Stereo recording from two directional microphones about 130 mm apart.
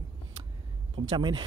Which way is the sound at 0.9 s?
40° right (ahead or behind).